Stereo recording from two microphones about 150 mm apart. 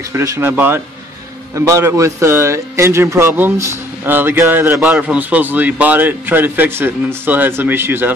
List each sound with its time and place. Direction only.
0.1 s a man's voice: 20° right (ahead or behind)